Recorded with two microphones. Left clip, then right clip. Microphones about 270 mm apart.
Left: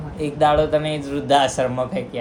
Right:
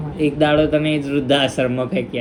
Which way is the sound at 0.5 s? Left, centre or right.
Left.